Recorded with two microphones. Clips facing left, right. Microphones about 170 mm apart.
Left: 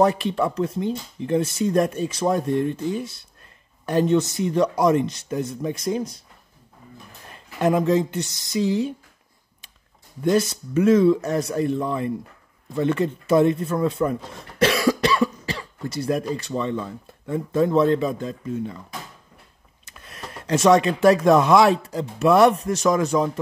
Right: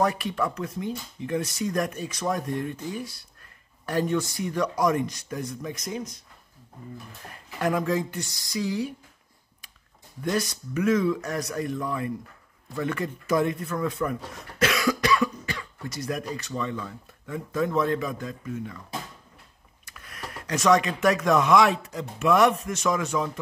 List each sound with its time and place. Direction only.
0.0 s speech: 25° left (ahead or behind)
7.3 s speech: 25° left (ahead or behind)
10.2 s speech: 25° left (ahead or behind)
19.8 s speech: 25° left (ahead or behind)